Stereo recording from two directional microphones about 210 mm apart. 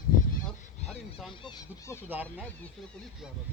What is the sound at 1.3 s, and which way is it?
Speech, 20° left (ahead or behind).